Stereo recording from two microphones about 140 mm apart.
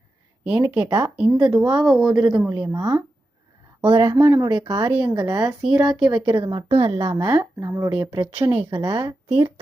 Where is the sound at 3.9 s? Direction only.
35° right (ahead or behind).